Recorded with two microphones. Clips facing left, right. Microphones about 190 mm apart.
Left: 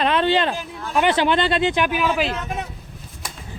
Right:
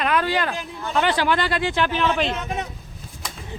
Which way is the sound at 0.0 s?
25° left (ahead or behind).